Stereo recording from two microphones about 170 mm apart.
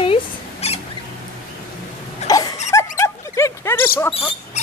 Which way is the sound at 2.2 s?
20° left (ahead or behind).